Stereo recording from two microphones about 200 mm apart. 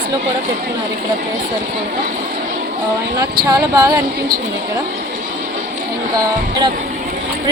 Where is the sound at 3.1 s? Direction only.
20° right (ahead or behind).